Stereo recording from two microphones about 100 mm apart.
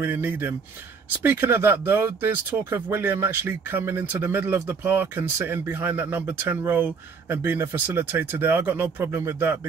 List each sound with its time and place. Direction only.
0.0 s speech: 20° right (ahead or behind)